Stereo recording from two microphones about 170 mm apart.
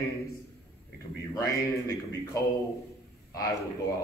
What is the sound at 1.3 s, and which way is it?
A man's voice, 20° left (ahead or behind).